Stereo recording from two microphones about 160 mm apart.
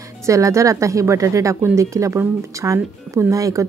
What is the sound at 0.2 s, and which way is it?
Speech, 20° right (ahead or behind).